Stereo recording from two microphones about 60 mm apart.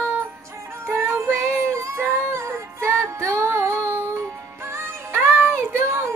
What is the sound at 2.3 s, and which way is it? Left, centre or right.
Music, right.